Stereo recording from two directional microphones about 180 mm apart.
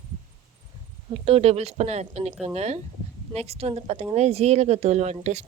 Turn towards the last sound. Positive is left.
turn(degrees=-40)  # may be behind; listen again after turning